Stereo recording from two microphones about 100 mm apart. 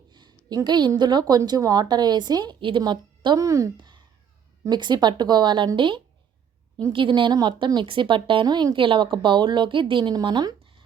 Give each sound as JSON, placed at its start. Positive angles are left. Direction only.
{"t": 0.1, "sound": "a woman's voice", "side_deg": -45}
{"t": 3.4, "sound": "a woman's voice", "side_deg": -35}
{"t": 3.8, "sound": "a sound", "side_deg": -50}
{"t": 4.7, "sound": "a woman's voice", "side_deg": -45}
{"t": 8.4, "sound": "a woman's voice", "side_deg": -45}